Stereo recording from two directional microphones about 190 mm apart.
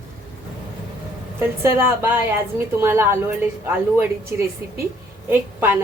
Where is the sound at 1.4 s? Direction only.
10° right (ahead or behind).